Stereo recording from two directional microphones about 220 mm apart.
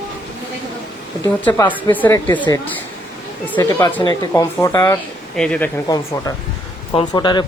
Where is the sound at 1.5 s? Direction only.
10° left (ahead or behind).